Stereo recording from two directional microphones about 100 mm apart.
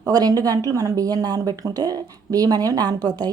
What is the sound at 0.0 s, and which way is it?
Speech, 40° right (ahead or behind).